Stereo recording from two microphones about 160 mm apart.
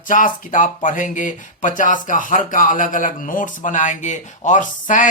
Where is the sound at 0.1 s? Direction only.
55° left (ahead or behind).